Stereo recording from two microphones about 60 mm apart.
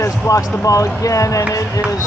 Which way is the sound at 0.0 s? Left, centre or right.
Left.